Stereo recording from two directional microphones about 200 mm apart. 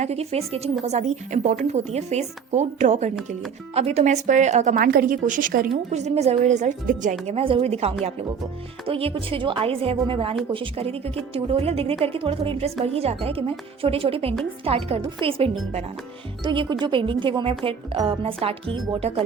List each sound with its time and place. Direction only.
0.0 s speech: 30° right (ahead or behind)